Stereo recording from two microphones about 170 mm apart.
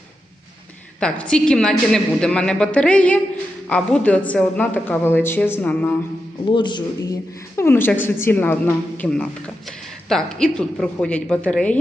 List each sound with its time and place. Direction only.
1.2 s a woman's voice: 5° left (ahead or behind)
6.4 s speech: 25° left (ahead or behind)
7.5 s a woman's voice: 15° left (ahead or behind)